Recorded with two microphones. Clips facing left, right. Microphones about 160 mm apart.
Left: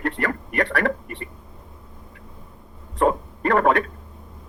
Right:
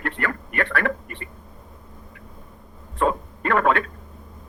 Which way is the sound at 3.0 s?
20° left (ahead or behind).